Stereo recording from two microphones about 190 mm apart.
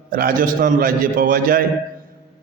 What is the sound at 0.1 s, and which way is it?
A man's voice, 50° right (ahead or behind).